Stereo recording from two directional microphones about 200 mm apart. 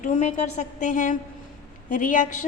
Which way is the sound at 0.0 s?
35° left (ahead or behind).